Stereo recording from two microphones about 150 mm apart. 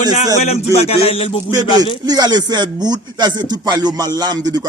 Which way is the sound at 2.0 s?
25° right (ahead or behind).